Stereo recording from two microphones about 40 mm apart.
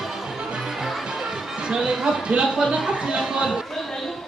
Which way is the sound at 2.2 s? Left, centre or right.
Right.